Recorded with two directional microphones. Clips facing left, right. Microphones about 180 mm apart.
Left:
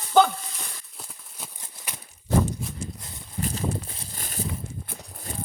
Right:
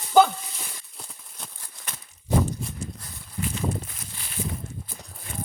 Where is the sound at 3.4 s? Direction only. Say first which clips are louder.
Even; 35° left (ahead or behind).